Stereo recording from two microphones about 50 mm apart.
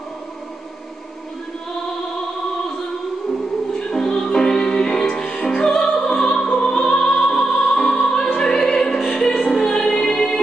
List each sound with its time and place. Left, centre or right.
3.7 s music: centre